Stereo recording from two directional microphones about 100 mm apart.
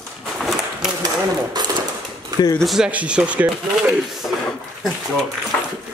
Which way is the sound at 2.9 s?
15° right (ahead or behind).